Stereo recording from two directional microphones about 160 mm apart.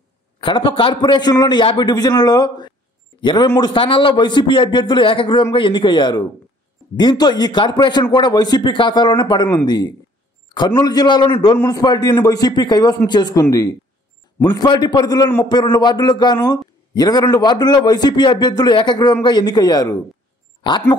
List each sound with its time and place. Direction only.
0.4 s a man's voice: 30° left (ahead or behind)